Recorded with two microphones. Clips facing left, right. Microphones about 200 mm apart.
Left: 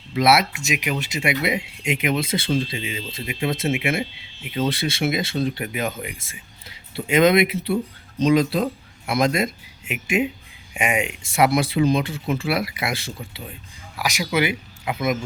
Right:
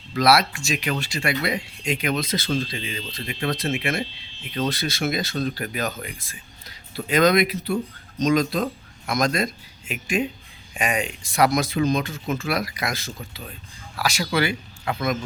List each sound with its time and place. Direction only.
0.1 s speech: 25° left (ahead or behind)
2.7 s speech: 10° left (ahead or behind)
4.8 s speech: 25° left (ahead or behind)
13.4 s speech: 15° left (ahead or behind)